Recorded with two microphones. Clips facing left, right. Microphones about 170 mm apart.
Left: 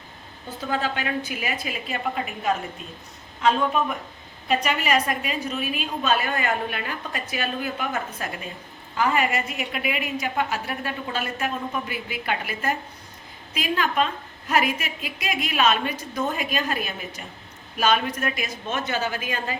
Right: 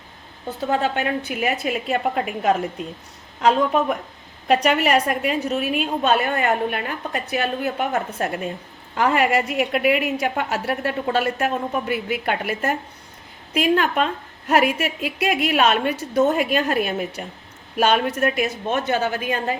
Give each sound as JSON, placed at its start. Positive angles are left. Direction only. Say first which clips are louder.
{"t": 0.7, "sound": "a woman's voice", "louder": "right 4 dB", "side_deg": -60}
{"t": 9.0, "sound": "a woman's voice", "louder": "right 4 dB", "side_deg": -65}